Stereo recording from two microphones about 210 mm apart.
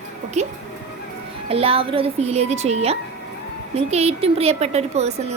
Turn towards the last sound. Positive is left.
turn(degrees=-30)  # may be behind; listen again after turning